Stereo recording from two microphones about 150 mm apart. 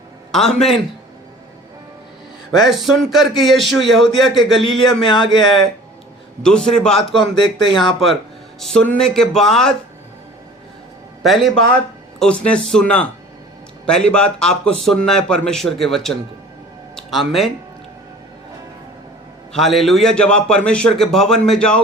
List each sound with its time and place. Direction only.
0.3 s speech: 5° left (ahead or behind)
2.5 s speech: centre (ahead or behind)
4.9 s speech: 35° left (ahead or behind)
6.4 s speech: 5° left (ahead or behind)
7.2 s speech: 35° left (ahead or behind)
8.6 s speech: 5° left (ahead or behind)
11.2 s speech: centre (ahead or behind)
19.5 s speech: centre (ahead or behind)